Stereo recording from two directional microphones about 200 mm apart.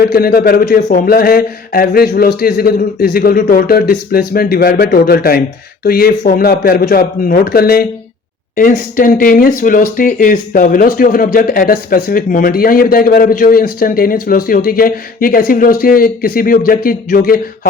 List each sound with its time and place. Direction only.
0.0 s speech: 50° left (ahead or behind)